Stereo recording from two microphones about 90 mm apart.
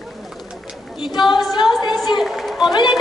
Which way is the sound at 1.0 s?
55° left (ahead or behind).